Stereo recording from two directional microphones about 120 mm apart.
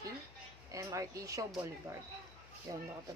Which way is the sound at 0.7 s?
25° right (ahead or behind).